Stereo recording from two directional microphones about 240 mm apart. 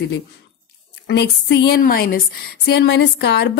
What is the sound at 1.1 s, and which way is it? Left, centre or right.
A woman's voice, left.